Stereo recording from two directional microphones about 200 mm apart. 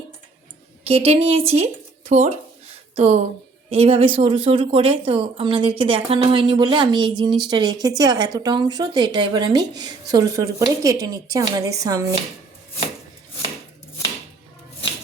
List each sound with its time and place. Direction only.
0.9 s a woman's voice: 30° right (ahead or behind)